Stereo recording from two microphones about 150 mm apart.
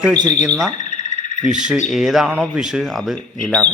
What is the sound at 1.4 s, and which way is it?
Speech, 55° right (ahead or behind).